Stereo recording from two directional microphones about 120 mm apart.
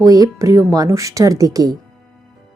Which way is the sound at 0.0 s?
30° right (ahead or behind).